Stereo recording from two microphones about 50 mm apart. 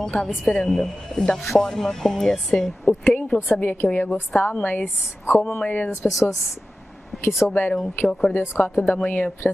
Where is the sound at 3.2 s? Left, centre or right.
Left.